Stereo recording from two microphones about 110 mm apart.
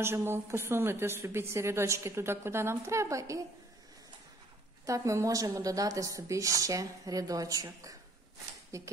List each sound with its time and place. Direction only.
0.0 s a woman's voice: 20° right (ahead or behind)
4.8 s a woman's voice: 30° right (ahead or behind)